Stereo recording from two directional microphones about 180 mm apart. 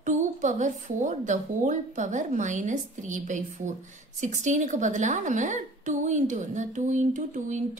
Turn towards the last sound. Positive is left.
turn(degrees=-45)  # may be behind; listen again after turning